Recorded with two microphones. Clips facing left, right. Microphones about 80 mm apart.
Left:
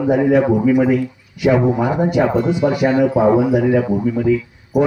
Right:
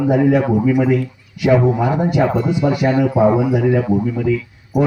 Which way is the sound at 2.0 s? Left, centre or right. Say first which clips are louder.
Left 3 dB; centre.